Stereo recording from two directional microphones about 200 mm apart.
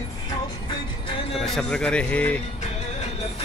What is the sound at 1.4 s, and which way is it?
Speech, centre (ahead or behind).